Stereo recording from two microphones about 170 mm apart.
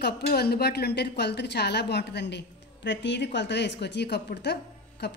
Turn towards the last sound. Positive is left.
turn(degrees=80)